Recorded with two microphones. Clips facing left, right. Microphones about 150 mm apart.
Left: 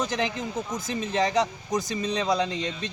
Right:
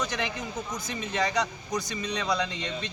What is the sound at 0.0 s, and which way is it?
Speech, 30° left (ahead or behind).